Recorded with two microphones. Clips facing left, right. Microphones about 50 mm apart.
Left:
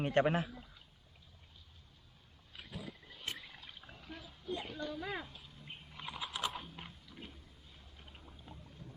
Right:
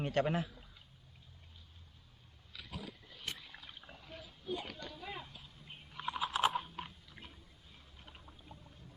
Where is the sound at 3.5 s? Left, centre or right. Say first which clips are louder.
Right 1 dB; centre.